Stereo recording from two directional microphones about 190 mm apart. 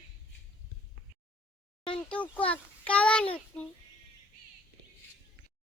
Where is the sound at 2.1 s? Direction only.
5° left (ahead or behind).